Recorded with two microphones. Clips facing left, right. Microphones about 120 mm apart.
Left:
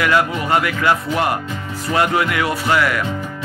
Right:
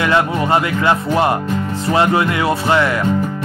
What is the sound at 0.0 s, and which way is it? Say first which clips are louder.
Speech: right 2 dB; 25° right (ahead or behind).